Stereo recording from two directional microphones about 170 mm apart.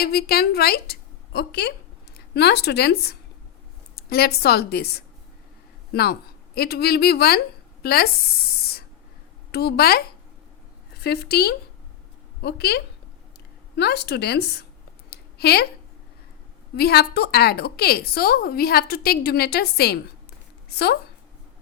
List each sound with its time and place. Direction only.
0.0 s a woman's voice: 65° left (ahead or behind)
15.1 s a sound: 70° left (ahead or behind)
16.7 s a woman's voice: 70° left (ahead or behind)